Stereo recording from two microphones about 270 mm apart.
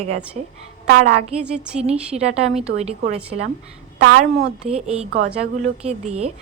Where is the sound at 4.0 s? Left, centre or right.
Right.